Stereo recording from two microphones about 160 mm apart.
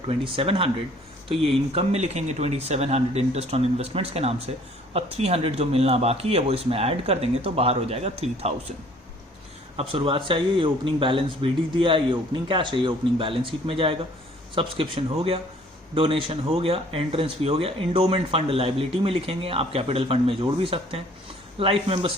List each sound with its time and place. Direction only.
0.1 s speech: 35° right (ahead or behind)
9.7 s speech: 35° right (ahead or behind)